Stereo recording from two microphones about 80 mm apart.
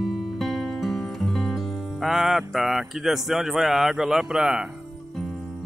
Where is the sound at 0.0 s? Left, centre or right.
Centre.